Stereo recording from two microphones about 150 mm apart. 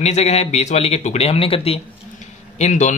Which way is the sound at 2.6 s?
50° left (ahead or behind).